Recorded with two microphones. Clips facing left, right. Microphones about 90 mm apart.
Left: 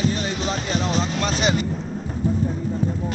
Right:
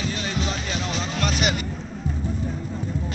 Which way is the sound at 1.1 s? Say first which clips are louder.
Left 2 dB; 30° left (ahead or behind).